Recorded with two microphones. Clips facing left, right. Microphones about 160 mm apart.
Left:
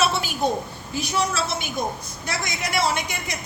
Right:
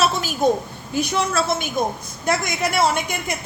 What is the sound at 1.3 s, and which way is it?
A woman's voice, 50° right (ahead or behind).